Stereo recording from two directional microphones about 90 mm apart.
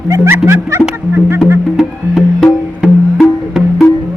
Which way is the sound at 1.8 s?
Centre (ahead or behind).